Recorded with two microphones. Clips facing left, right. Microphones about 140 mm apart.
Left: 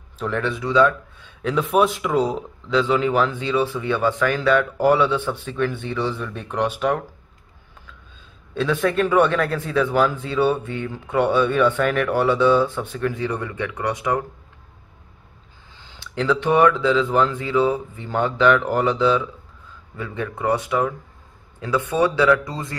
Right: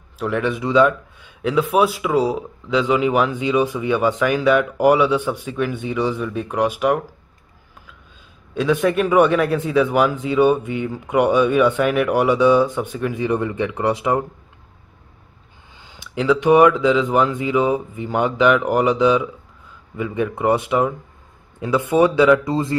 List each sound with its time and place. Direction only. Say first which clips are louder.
0.2 s speech: right 3 dB; 10° right (ahead or behind)
1.4 s speech: right 2 dB; 5° right (ahead or behind)
8.5 s speech: right 2 dB; 10° right (ahead or behind); by 14.2 s 25° right (ahead or behind)
15.9 s speech: right 3 dB; 10° right (ahead or behind)